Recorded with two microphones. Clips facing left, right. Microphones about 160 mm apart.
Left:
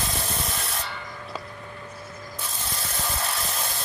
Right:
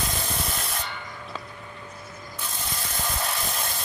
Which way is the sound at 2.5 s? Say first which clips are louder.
Right 1 dB; centre (ahead or behind).